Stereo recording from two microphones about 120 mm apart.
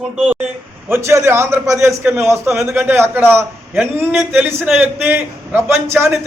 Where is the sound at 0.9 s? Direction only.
20° right (ahead or behind).